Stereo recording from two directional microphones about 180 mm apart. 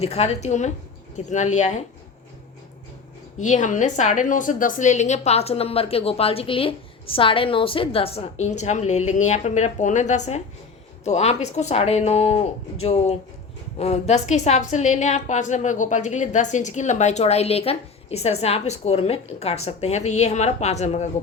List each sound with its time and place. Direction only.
0.0 s a woman's voice: 35° left (ahead or behind)
3.3 s a woman's voice: 40° left (ahead or behind)